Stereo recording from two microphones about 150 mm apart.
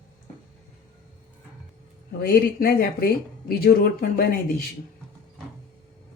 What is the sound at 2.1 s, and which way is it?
Speech, 90° left.